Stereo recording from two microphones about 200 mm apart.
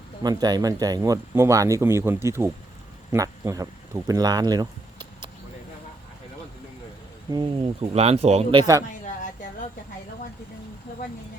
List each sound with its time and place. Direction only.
0.2 s speech: 20° right (ahead or behind)
7.3 s speech: 20° right (ahead or behind)
7.8 s speech: 30° right (ahead or behind)